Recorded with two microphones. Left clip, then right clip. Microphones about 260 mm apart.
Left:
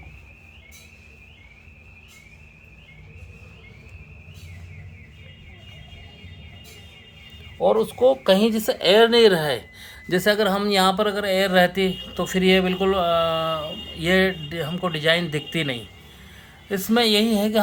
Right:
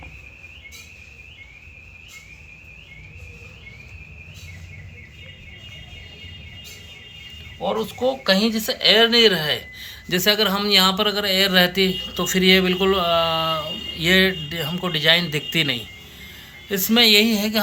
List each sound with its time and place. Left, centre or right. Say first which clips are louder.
7.6 s speech: left 5 dB; left